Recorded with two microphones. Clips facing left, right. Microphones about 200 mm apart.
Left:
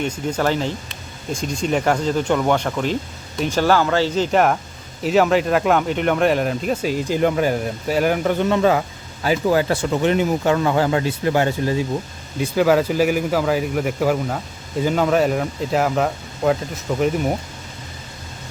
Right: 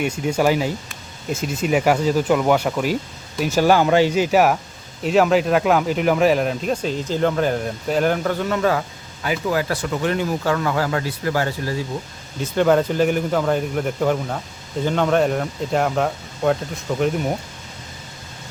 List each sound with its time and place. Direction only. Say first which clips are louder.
0.0 s speech: right 2 dB; 10° right (ahead or behind); by 11.8 s 20° left (ahead or behind)
12.4 s speech: left 1 dB; 5° left (ahead or behind)